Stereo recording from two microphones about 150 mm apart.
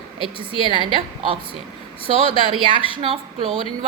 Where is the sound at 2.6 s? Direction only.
35° right (ahead or behind).